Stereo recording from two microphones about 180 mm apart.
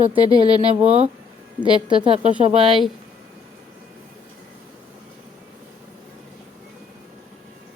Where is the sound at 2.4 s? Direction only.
30° right (ahead or behind).